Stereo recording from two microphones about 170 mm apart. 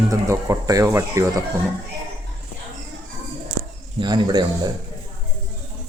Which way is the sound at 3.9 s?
25° right (ahead or behind).